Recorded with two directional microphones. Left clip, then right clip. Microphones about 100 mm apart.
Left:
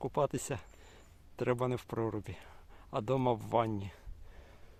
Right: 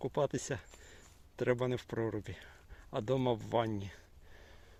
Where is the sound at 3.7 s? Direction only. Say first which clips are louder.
Left 1 dB; 20° left (ahead or behind).